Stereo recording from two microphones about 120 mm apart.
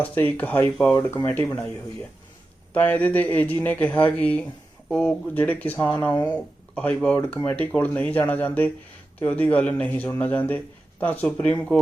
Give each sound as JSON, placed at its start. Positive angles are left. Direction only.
{"t": 0.0, "sound": "speech", "side_deg": 15}